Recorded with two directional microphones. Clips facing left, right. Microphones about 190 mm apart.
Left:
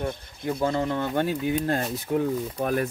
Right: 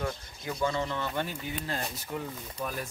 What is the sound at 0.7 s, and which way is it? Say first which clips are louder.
Speech: left 6 dB; 50° left (ahead or behind).